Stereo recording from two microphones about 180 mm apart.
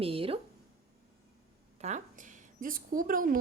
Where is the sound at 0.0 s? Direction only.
30° right (ahead or behind).